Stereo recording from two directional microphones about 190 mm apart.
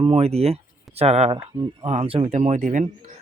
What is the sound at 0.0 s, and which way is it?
Speech, 30° right (ahead or behind).